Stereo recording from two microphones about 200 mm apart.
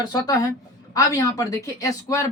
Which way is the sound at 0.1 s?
15° left (ahead or behind).